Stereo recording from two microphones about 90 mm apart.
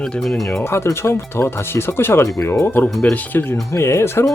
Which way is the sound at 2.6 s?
20° left (ahead or behind).